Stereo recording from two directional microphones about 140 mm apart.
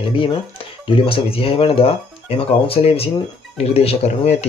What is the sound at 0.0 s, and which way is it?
Speech, 40° left (ahead or behind).